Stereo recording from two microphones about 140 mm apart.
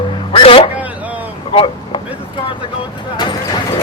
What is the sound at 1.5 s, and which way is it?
Vehicle, 40° left (ahead or behind).